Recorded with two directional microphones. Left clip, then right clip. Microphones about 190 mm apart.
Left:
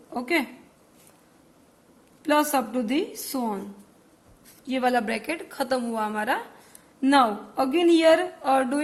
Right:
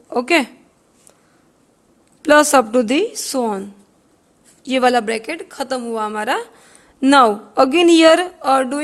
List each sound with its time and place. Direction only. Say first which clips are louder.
0.1 s speech: right 10 dB; 60° right (ahead or behind)
2.2 s a woman's voice: right 11 dB; 60° right (ahead or behind)
4.6 s a woman's voice: right 9 dB; 55° right (ahead or behind)
7.0 s a woman's voice: right 9 dB; 55° right (ahead or behind)